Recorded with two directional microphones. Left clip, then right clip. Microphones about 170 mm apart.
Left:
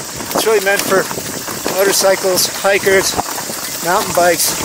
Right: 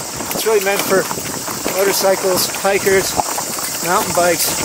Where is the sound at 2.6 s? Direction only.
15° right (ahead or behind).